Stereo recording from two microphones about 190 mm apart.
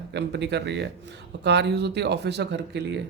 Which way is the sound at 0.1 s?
65° right (ahead or behind).